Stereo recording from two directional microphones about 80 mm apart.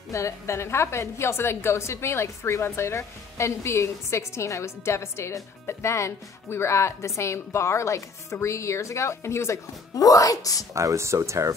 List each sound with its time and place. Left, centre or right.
0.1 s a woman's voice: left
10.7 s speech: right